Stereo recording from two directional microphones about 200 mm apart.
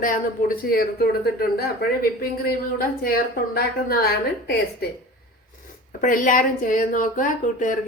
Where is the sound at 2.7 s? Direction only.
50° left (ahead or behind).